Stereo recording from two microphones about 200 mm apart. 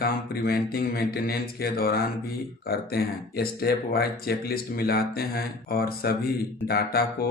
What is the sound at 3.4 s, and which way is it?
Speech, 50° left (ahead or behind).